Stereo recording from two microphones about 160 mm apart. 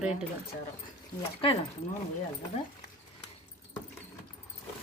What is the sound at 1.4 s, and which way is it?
Speech, 35° left (ahead or behind).